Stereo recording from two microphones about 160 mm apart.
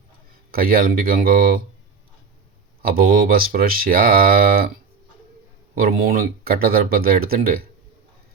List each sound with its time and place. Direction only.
0.5 s speech: 65° right (ahead or behind)
2.8 s speech: 65° right (ahead or behind)
5.7 s speech: 65° right (ahead or behind)